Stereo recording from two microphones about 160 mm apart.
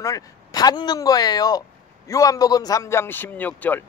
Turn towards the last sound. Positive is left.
turn(degrees=10)  # may be behind; listen again after turning